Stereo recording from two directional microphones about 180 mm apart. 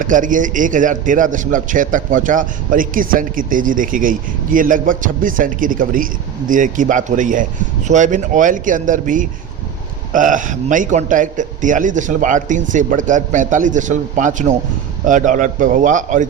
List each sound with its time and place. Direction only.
0.0 s a man's voice: 45° right (ahead or behind)